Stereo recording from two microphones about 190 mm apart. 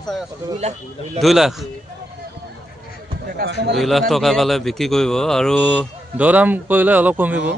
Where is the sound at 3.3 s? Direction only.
60° right (ahead or behind).